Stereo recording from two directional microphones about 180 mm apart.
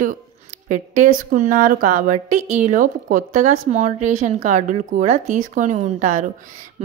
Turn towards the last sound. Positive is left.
turn(degrees=-45)  # may be behind; listen again after turning